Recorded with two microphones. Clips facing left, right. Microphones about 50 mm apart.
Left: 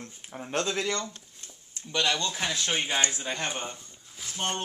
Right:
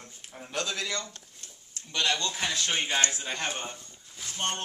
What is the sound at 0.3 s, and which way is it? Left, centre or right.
Speech, left.